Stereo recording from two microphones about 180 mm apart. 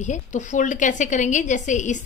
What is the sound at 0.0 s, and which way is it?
A woman's voice, 40° left (ahead or behind).